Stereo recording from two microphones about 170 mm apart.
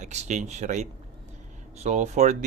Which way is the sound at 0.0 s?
40° right (ahead or behind).